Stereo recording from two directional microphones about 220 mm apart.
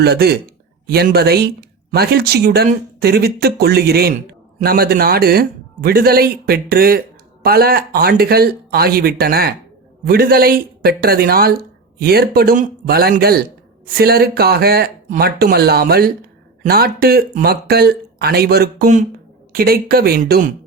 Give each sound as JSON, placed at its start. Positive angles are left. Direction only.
{"t": 0.0, "sound": "speech", "side_deg": -45}